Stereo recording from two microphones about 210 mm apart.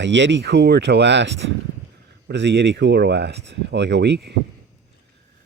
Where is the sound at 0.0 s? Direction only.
60° right (ahead or behind).